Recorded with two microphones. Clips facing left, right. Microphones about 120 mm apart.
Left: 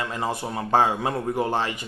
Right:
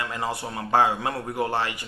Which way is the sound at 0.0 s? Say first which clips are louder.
Left 2 dB; 20° left (ahead or behind).